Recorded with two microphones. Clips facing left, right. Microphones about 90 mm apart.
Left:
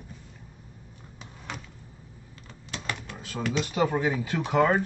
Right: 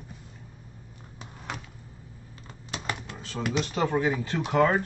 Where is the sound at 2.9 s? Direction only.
20° right (ahead or behind).